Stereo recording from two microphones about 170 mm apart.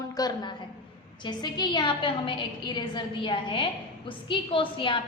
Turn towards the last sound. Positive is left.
turn(degrees=30)  # may be behind; listen again after turning